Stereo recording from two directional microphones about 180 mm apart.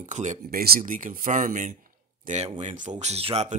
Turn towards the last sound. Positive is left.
turn(degrees=-35)  # may be behind; listen again after turning